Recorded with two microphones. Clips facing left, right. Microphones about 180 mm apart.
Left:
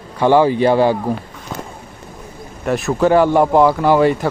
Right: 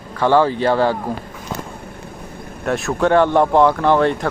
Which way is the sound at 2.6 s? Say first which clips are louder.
Left 2 dB; centre (ahead or behind).